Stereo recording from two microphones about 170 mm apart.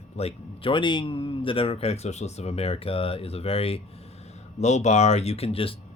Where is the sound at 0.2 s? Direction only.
35° left (ahead or behind).